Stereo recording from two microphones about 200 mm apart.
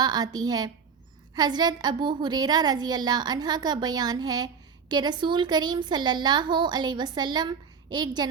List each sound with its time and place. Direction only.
0.0 s a woman's voice: 20° right (ahead or behind)